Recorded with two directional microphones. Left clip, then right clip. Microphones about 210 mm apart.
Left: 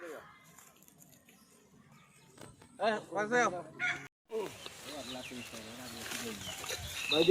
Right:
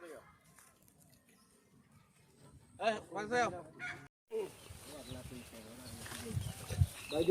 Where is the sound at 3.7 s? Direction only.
50° right (ahead or behind).